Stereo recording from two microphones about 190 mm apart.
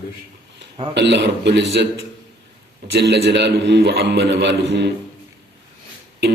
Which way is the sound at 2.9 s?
65° right (ahead or behind).